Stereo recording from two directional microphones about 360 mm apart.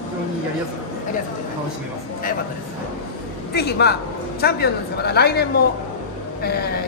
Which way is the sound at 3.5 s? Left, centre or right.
Left.